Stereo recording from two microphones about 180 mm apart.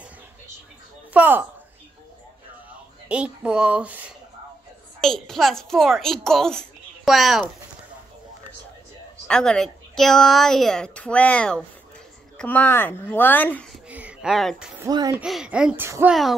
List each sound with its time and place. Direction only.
1.1 s a woman's voice: 10° right (ahead or behind)
2.7 s a woman's voice: 5° right (ahead or behind)
9.3 s a woman's voice: 5° left (ahead or behind)
13.8 s speech: 5° right (ahead or behind)
14.9 s speech: 20° right (ahead or behind)
15.1 s a woman's voice: 5° right (ahead or behind)